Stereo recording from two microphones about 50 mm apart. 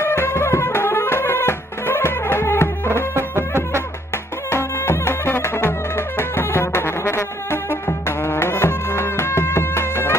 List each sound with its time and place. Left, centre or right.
0.0 s music: left
3.2 s music: right
4.5 s music: left